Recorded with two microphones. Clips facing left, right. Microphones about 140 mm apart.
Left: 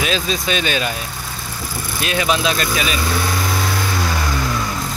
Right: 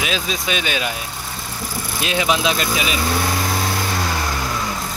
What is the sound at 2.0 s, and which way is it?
Speech, 15° right (ahead or behind).